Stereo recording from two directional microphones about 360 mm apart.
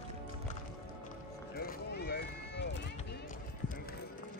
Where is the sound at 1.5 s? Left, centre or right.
Left.